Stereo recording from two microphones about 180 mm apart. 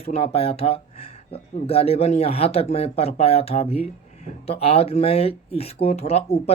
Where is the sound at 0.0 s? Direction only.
35° left (ahead or behind).